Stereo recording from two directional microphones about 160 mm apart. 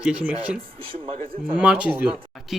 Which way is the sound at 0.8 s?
35° right (ahead or behind).